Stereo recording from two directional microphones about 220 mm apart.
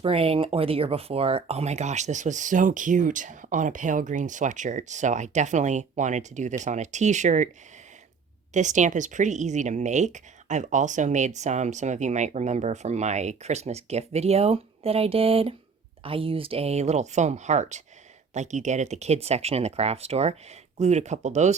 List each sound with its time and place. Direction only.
0.0 s speech: 25° right (ahead or behind)
8.5 s speech: 35° right (ahead or behind)